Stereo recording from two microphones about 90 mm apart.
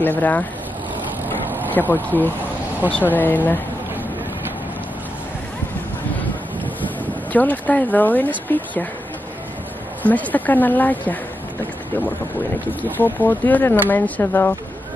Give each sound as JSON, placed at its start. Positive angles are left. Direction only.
{"t": 0.0, "sound": "speech", "side_deg": 20}
{"t": 1.7, "sound": "speech", "side_deg": 20}
{"t": 7.3, "sound": "speech", "side_deg": 20}
{"t": 10.0, "sound": "speech", "side_deg": 20}
{"t": 12.9, "sound": "speech", "side_deg": 20}